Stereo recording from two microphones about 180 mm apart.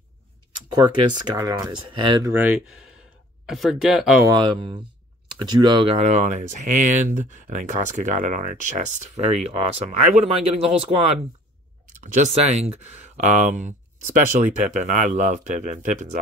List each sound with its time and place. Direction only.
0.7 s speech: 25° right (ahead or behind)
2.3 s speech: 5° right (ahead or behind)
4.3 s speech: 25° right (ahead or behind); by 16.2 s 45° right (ahead or behind)